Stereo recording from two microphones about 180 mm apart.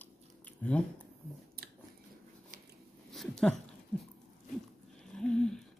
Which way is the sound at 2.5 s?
45° right (ahead or behind).